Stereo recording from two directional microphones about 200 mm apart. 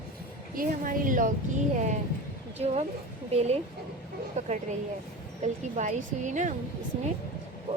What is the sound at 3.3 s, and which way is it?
A woman's voice, 30° right (ahead or behind).